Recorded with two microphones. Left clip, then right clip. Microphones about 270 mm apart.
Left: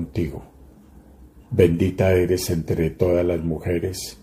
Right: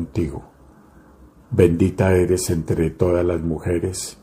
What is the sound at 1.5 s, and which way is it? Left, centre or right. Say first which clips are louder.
Speech: right 1 dB; centre.